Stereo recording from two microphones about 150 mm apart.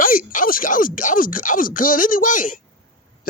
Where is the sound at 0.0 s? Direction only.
70° left (ahead or behind).